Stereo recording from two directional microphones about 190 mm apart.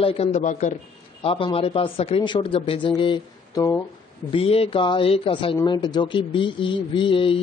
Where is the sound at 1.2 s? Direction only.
30° left (ahead or behind).